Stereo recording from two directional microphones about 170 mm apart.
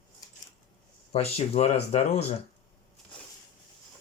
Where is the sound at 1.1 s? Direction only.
35° left (ahead or behind).